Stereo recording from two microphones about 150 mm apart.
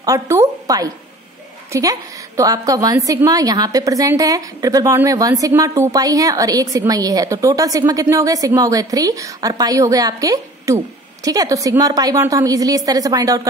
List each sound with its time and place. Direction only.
0.0 s a woman's voice: 20° right (ahead or behind)